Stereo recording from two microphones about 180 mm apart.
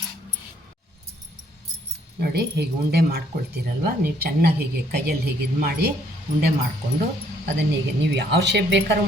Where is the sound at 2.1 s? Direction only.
60° right (ahead or behind).